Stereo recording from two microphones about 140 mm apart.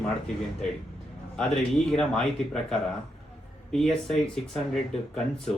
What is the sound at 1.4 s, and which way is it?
Speech, 5° left (ahead or behind).